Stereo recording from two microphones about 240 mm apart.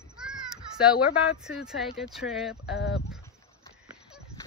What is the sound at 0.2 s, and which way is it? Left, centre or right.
Children playing, centre.